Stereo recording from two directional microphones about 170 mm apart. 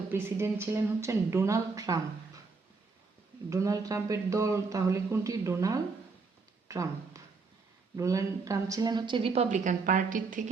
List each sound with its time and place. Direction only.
0.1 s a woman's voice: 15° right (ahead or behind)
3.5 s a woman's voice: 20° right (ahead or behind); by 10.5 s 50° right (ahead or behind)